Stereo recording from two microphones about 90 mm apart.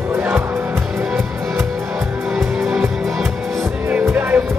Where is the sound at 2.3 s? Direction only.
5° right (ahead or behind).